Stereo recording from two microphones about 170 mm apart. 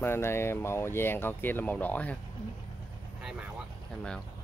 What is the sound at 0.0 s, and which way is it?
Speech, 15° left (ahead or behind).